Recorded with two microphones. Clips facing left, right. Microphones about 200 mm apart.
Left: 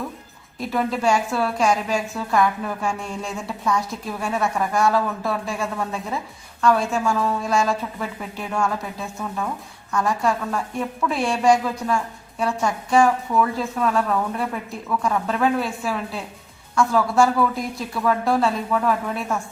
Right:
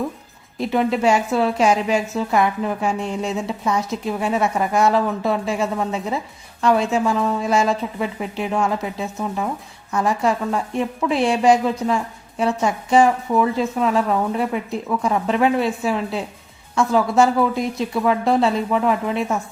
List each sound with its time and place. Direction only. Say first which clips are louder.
0.6 s a woman's voice: right 4 dB; 25° right (ahead or behind)